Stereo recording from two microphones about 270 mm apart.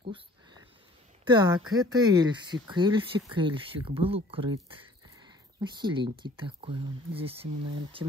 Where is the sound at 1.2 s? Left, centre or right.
Centre.